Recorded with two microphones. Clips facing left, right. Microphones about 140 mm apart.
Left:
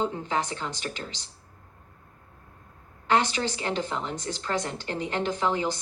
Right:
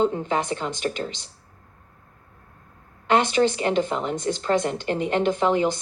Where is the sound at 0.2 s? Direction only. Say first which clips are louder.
Right 4 dB; 20° right (ahead or behind).